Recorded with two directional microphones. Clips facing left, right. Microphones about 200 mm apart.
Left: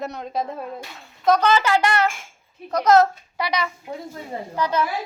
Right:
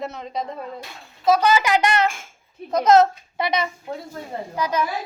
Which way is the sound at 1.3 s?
10° right (ahead or behind).